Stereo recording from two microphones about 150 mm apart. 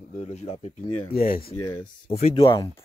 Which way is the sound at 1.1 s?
75° left (ahead or behind).